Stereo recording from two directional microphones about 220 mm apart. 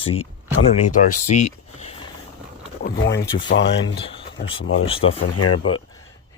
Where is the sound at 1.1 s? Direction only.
35° left (ahead or behind).